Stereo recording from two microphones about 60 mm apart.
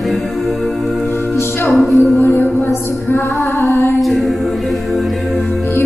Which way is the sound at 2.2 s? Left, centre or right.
Left.